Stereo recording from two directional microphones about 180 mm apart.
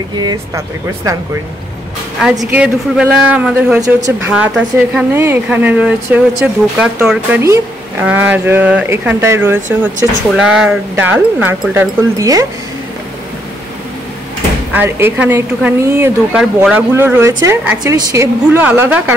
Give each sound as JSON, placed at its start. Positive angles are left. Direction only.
{"t": 0.2, "sound": "speech", "side_deg": -20}
{"t": 2.5, "sound": "speech", "side_deg": -5}
{"t": 14.7, "sound": "speech", "side_deg": -10}
{"t": 16.3, "sound": "speech", "side_deg": -5}
{"t": 16.9, "sound": "speech", "side_deg": -15}